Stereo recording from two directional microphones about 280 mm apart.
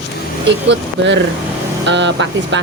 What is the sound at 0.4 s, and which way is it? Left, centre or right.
Speech, right.